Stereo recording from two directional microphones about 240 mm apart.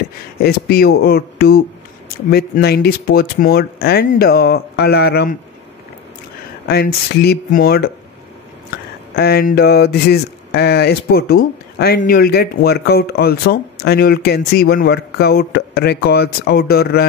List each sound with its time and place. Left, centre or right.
0.4 s speech: left
6.7 s speech: left